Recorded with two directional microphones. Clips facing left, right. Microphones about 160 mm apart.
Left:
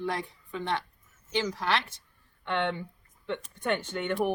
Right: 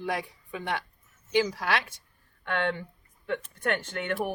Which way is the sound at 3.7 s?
20° left (ahead or behind).